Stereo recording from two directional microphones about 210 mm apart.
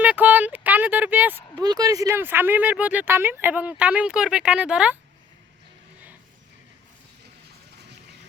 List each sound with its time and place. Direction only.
0.0 s speech: 10° right (ahead or behind)